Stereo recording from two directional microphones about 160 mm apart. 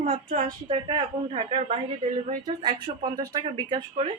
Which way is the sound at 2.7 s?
30° right (ahead or behind).